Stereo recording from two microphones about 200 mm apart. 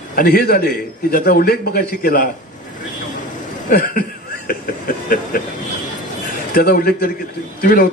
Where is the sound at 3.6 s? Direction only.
45° left (ahead or behind).